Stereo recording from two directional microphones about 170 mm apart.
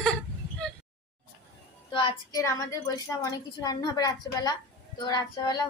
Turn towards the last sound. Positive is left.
turn(degrees=25)  # may be behind; listen again after turning